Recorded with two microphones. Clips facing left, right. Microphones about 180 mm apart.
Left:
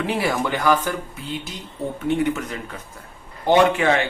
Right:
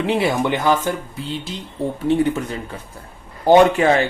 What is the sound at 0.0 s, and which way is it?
Speech, 25° right (ahead or behind).